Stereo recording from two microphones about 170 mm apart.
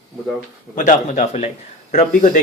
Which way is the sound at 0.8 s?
45° left (ahead or behind).